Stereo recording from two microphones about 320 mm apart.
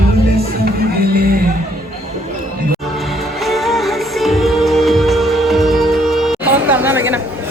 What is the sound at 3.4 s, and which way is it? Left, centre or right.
Music, centre.